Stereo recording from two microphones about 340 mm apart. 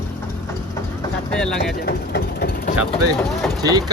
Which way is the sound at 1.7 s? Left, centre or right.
Left.